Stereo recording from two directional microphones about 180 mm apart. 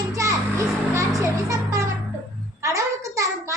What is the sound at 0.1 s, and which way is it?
Music, 15° right (ahead or behind).